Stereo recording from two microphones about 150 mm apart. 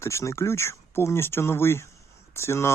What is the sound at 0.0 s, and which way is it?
Speech, 20° left (ahead or behind).